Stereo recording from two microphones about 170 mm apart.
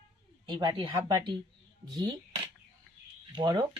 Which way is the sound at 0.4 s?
25° right (ahead or behind).